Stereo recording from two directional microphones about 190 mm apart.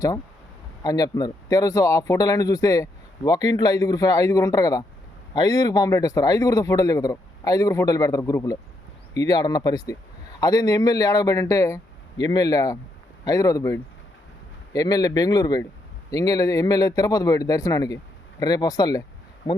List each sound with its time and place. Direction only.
0.8 s speech: 20° left (ahead or behind)